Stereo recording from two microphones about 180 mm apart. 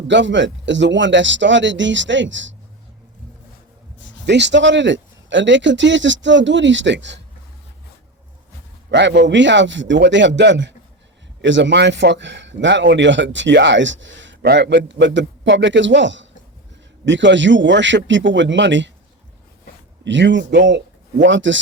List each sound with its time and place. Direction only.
0.1 s speech: 90° right
4.3 s speech: 75° right (ahead or behind)
8.9 s a man's voice: 75° right (ahead or behind)
9.2 s speech: 90° right
20.1 s speech: 90° right
21.2 s speech: 90° right